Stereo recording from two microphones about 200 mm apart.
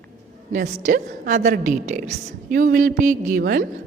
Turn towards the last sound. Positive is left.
turn(degrees=-50)  # may be behind; listen again after turning